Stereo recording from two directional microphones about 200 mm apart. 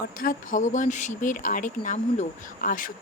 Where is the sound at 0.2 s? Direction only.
40° left (ahead or behind).